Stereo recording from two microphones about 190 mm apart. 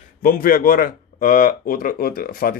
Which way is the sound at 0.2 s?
50° left (ahead or behind).